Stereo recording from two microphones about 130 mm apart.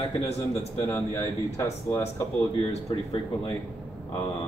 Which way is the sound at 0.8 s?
20° left (ahead or behind).